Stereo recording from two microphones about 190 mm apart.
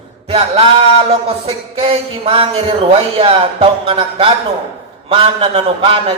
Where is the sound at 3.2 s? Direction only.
30° right (ahead or behind).